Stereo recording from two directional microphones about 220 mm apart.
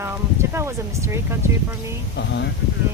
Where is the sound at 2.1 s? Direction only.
55° left (ahead or behind).